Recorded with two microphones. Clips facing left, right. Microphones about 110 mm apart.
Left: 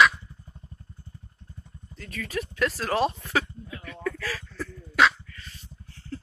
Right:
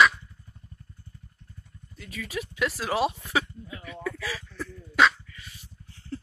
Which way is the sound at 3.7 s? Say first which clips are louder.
Left 2 dB; 10° right (ahead or behind).